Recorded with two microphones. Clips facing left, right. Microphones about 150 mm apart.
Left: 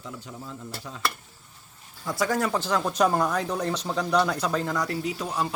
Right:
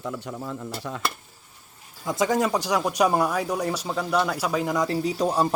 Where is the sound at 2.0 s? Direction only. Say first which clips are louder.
Right 3 dB; 20° right (ahead or behind).